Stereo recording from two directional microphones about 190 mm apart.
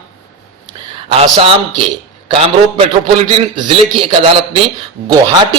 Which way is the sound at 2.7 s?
30° right (ahead or behind).